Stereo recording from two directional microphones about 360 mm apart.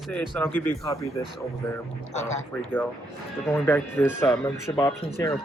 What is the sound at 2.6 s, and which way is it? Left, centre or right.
Speech, centre.